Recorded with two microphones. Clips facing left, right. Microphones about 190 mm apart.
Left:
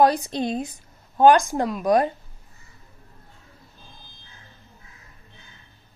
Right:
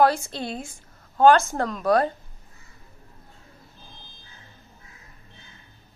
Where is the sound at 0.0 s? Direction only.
20° left (ahead or behind).